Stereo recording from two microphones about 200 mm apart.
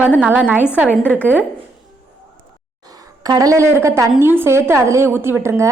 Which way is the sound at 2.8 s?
20° right (ahead or behind).